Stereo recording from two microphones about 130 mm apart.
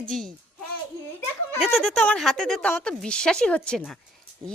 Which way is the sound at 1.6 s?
Centre (ahead or behind).